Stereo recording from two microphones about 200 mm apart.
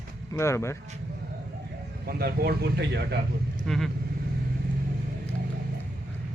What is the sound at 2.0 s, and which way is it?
Speech, 50° right (ahead or behind).